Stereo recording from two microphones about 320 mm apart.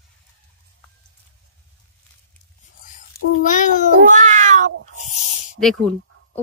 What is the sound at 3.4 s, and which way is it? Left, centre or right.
Speech, left.